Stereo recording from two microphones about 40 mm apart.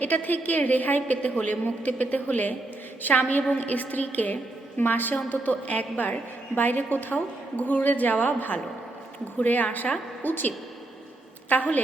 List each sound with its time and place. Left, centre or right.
0.0 s a woman's voice: left
11.4 s a woman's voice: left